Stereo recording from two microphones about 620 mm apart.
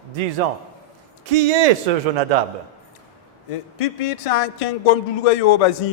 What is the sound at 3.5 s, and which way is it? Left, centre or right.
A man's voice, left.